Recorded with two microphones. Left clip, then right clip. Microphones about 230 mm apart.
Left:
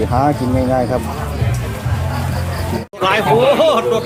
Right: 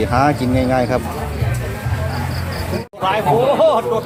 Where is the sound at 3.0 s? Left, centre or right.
Left.